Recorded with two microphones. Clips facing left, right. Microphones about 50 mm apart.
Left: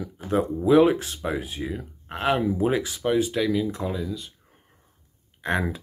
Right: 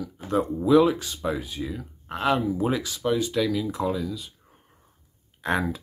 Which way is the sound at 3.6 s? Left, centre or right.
Centre.